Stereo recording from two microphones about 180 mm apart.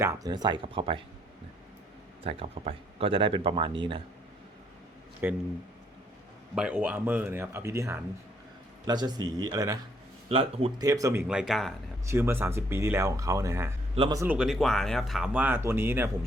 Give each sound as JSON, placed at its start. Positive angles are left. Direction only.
{"t": 0.0, "sound": "speech", "side_deg": -15}
{"t": 2.2, "sound": "speech", "side_deg": -30}
{"t": 5.2, "sound": "speech", "side_deg": -15}
{"t": 6.6, "sound": "speech", "side_deg": -5}
{"t": 10.2, "sound": "speech", "side_deg": -30}
{"t": 10.8, "sound": "speech", "side_deg": -20}
{"t": 12.0, "sound": "speech", "side_deg": -15}
{"t": 13.9, "sound": "speech", "side_deg": -30}
{"t": 14.2, "sound": "speech", "side_deg": -5}
{"t": 15.3, "sound": "speech", "side_deg": -10}